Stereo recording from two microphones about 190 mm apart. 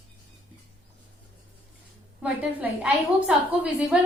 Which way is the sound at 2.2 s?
5° right (ahead or behind).